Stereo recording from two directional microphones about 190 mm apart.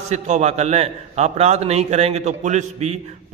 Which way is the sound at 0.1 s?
35° right (ahead or behind).